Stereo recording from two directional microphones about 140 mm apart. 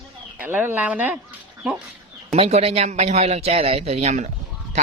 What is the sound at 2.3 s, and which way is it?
A man's voice, 50° right (ahead or behind).